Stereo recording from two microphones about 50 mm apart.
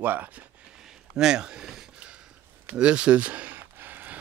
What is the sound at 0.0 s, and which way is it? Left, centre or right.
Speech, right.